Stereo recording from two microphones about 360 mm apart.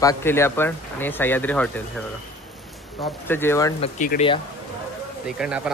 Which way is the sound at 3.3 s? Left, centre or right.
Centre.